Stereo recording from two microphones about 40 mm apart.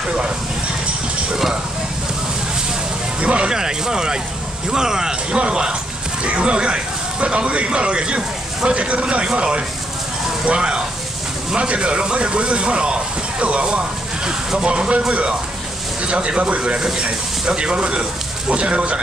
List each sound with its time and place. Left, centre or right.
3.2 s music: right
3.5 s speech: centre